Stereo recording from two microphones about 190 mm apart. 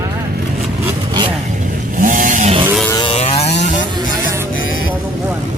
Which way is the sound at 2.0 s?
45° right (ahead or behind).